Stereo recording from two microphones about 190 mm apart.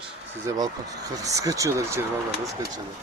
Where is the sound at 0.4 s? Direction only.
20° right (ahead or behind).